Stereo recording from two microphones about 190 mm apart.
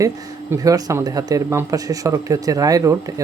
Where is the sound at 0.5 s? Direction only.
20° right (ahead or behind).